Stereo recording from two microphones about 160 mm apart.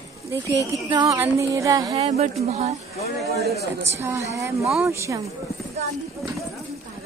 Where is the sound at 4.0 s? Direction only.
20° right (ahead or behind).